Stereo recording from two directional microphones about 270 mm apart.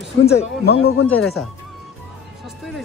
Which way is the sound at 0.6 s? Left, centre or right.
Left.